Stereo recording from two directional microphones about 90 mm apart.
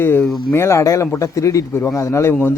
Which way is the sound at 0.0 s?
25° left (ahead or behind).